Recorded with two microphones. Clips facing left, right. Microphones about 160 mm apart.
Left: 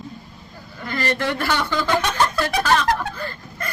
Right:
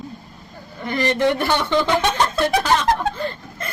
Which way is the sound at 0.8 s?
20° right (ahead or behind).